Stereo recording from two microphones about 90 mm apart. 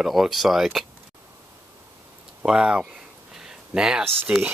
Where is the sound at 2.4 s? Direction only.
10° right (ahead or behind).